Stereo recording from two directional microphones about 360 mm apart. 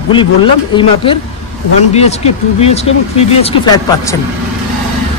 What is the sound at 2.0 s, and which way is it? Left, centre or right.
Speech, centre.